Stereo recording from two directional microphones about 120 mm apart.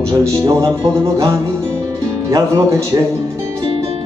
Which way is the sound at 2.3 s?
25° right (ahead or behind).